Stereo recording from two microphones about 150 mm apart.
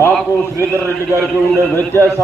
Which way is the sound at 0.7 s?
20° right (ahead or behind).